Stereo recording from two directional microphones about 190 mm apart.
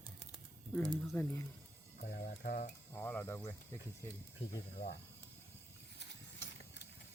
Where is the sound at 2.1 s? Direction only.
50° left (ahead or behind).